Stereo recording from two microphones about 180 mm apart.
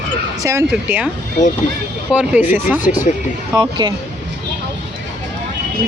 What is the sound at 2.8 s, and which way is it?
Speech, 45° left (ahead or behind).